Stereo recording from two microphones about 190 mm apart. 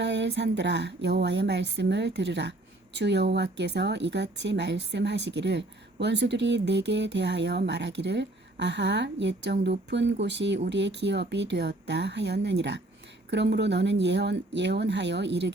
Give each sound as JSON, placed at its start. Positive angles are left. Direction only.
{"t": 0.0, "sound": "speech", "side_deg": -65}